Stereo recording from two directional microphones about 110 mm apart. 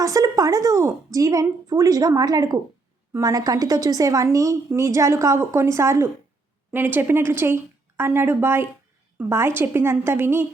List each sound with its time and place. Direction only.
0.0 s a woman's voice: 30° right (ahead or behind)